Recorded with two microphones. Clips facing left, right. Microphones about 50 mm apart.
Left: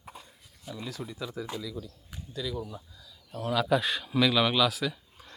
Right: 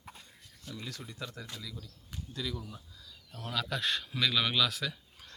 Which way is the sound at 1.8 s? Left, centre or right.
Centre.